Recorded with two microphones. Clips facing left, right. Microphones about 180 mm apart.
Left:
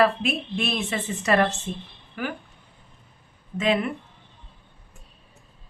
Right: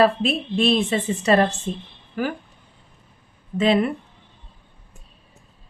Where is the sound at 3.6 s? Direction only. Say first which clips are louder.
Right 5 dB; 35° right (ahead or behind).